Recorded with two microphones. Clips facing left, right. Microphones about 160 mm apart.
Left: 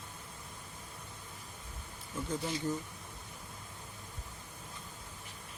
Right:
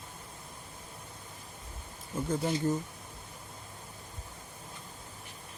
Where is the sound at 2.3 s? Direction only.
45° right (ahead or behind).